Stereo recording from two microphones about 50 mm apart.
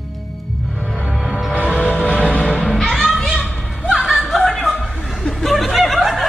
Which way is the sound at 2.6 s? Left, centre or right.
Centre.